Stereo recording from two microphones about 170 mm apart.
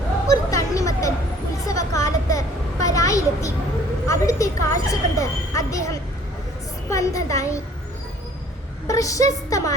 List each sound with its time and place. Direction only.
0.3 s a sound: 20° left (ahead or behind)
4.0 s a woman's voice: 20° left (ahead or behind)
8.9 s a woman's voice: 20° left (ahead or behind)